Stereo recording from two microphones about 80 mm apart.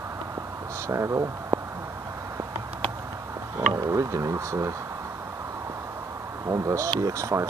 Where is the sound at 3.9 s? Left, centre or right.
Right.